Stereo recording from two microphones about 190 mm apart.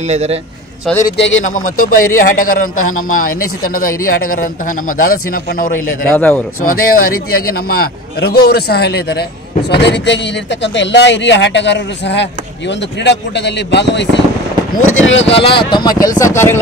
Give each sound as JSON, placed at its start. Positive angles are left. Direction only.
{"t": 0.1, "sound": "a man's voice", "side_deg": -35}
{"t": 1.1, "sound": "speech", "side_deg": 70}
{"t": 1.8, "sound": "a man's voice", "side_deg": 45}
{"t": 6.0, "sound": "a man's voice", "side_deg": 5}
{"t": 6.6, "sound": "a man's voice", "side_deg": 50}
{"t": 14.8, "sound": "speech", "side_deg": 90}
{"t": 15.2, "sound": "speech", "side_deg": 30}